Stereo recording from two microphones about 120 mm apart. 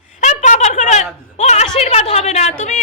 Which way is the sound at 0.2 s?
90° left.